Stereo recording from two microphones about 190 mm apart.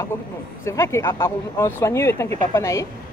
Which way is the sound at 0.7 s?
15° left (ahead or behind).